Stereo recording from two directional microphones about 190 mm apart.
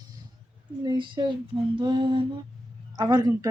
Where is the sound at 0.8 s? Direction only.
25° right (ahead or behind).